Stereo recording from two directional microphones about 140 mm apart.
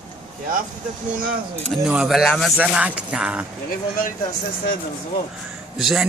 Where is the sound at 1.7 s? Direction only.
5° right (ahead or behind).